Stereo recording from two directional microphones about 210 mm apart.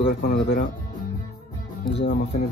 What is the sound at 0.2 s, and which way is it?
Speech, 50° left (ahead or behind).